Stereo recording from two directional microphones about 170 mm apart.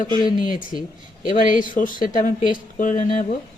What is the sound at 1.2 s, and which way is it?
Speech, 55° left (ahead or behind).